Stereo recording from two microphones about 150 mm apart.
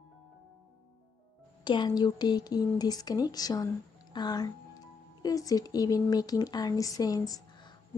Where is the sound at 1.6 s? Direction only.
30° left (ahead or behind).